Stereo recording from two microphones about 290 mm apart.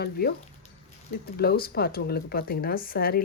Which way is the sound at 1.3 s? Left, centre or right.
Left.